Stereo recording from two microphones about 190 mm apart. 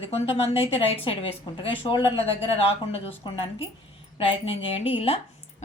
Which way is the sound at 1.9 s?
30° left (ahead or behind).